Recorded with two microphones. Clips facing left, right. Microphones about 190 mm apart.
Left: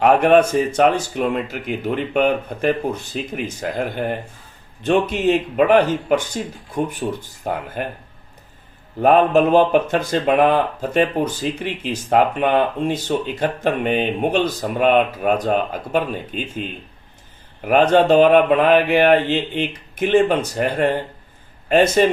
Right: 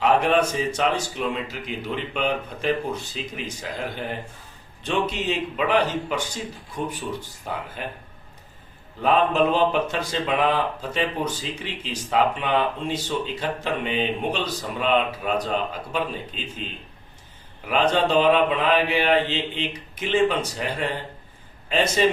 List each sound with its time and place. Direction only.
0.0 s speech: 55° left (ahead or behind)
9.0 s speech: 55° left (ahead or behind)
17.6 s speech: 55° left (ahead or behind)